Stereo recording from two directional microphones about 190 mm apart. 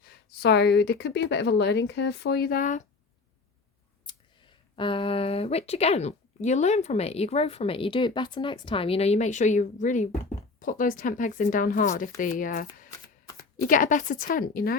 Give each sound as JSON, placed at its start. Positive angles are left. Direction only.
{"t": 0.0, "sound": "speech", "side_deg": 55}
{"t": 4.8, "sound": "speech", "side_deg": 25}